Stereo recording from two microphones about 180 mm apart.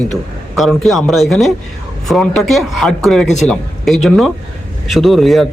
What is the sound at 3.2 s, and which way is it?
Speech, 40° left (ahead or behind).